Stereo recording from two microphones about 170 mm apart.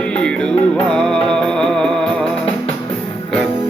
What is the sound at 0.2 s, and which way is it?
Music, 5° left (ahead or behind).